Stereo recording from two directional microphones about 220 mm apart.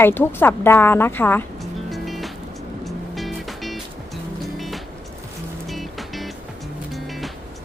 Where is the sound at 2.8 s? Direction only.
Centre (ahead or behind).